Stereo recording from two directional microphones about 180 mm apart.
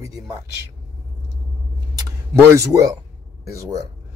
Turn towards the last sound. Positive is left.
turn(degrees=-15)  # may be behind; listen again after turning